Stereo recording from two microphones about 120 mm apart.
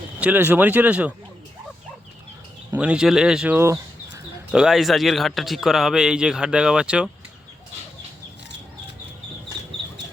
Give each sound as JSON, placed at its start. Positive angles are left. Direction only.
{"t": 0.2, "sound": "speech", "side_deg": -15}
{"t": 2.7, "sound": "speech", "side_deg": -10}
{"t": 3.5, "sound": "speech", "side_deg": -20}
{"t": 4.5, "sound": "speech", "side_deg": -5}